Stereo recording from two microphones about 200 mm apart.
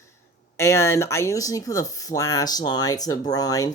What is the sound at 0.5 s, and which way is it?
Speech, 15° left (ahead or behind).